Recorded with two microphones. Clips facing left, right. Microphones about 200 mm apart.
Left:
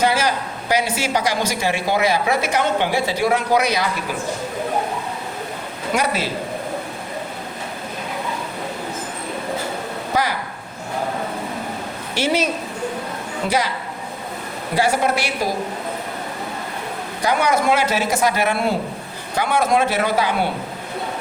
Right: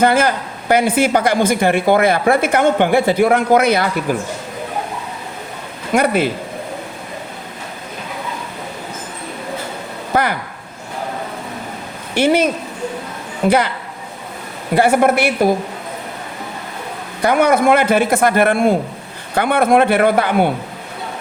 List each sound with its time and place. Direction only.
0.0 s speech: 55° right (ahead or behind)
5.9 s speech: 55° right (ahead or behind)
10.1 s speech: 55° right (ahead or behind)
12.1 s a woman's voice: 55° right (ahead or behind)
14.8 s speech: 55° right (ahead or behind)
17.2 s speech: 55° right (ahead or behind)